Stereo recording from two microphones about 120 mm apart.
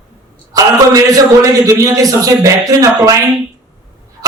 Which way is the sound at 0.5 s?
30° right (ahead or behind).